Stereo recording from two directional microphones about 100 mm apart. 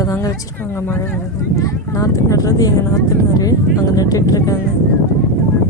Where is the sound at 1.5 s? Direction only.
35° left (ahead or behind).